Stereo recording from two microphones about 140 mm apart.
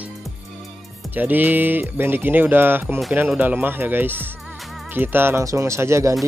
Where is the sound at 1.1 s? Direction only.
10° right (ahead or behind).